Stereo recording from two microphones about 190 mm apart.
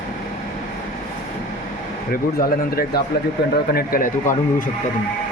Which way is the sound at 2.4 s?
50° left (ahead or behind).